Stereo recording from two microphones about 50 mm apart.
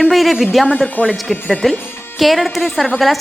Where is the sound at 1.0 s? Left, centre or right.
Left.